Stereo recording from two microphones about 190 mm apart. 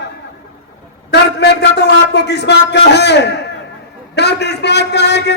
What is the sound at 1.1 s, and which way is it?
A man's voice, 60° left (ahead or behind).